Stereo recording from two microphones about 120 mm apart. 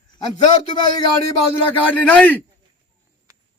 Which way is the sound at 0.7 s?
40° left (ahead or behind).